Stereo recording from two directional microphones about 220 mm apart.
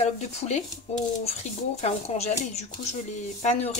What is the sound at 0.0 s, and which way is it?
Speech, 30° left (ahead or behind).